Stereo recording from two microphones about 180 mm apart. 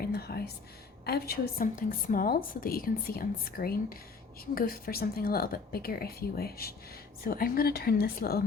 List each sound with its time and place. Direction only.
0.0 s whispering: 60° left (ahead or behind)
1.0 s a woman's voice: 60° left (ahead or behind)